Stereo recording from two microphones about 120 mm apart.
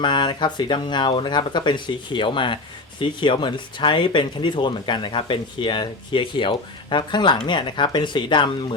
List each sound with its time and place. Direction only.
0.0 s speech: 40° left (ahead or behind)